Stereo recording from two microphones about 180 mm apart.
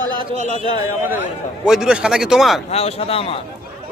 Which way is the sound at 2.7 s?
35° left (ahead or behind).